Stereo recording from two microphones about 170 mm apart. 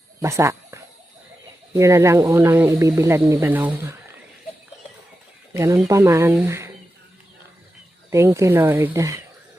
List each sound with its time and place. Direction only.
0.2 s a sound: 20° right (ahead or behind)
1.7 s speech: 15° right (ahead or behind)
5.5 s speech: 15° right (ahead or behind)
8.1 s speech: 15° right (ahead or behind)